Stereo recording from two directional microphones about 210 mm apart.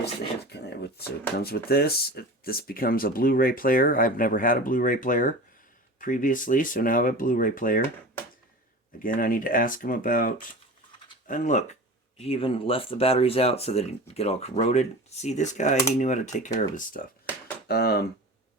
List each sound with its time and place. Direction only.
0.5 s speech: 50° left (ahead or behind)
9.0 s speech: 40° left (ahead or behind)
17.7 s speech: 50° left (ahead or behind)